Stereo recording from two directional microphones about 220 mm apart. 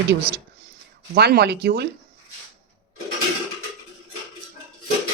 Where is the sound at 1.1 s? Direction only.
50° right (ahead or behind).